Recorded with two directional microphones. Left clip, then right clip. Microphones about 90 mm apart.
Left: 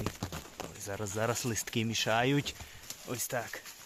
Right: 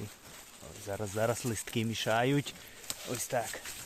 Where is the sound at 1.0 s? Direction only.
5° left (ahead or behind).